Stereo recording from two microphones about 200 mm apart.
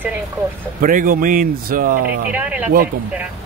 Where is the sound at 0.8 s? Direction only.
45° right (ahead or behind).